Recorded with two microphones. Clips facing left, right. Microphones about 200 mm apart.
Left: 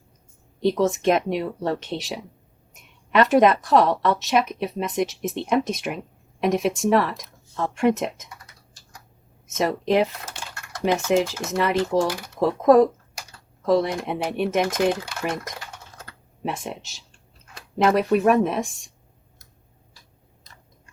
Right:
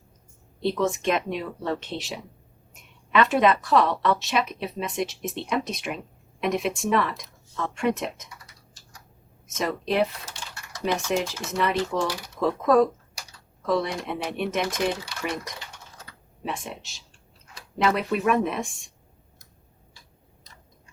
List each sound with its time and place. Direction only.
0.6 s speech: 40° left (ahead or behind)
3.2 s speech: 45° left (ahead or behind)
9.8 s speech: 50° left (ahead or behind)
17.5 s speech: 45° left (ahead or behind)